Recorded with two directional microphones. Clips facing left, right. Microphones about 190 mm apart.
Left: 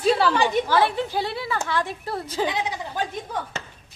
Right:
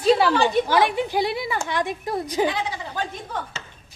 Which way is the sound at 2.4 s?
20° left (ahead or behind).